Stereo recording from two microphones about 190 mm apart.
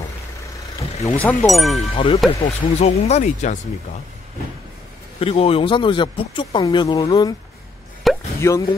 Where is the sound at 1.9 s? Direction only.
25° left (ahead or behind).